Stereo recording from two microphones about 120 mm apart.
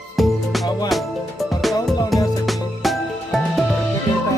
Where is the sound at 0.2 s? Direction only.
Centre (ahead or behind).